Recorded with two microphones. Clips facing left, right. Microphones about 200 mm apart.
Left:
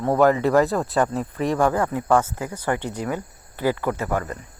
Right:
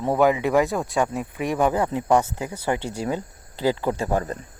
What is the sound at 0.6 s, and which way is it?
Speech, centre (ahead or behind).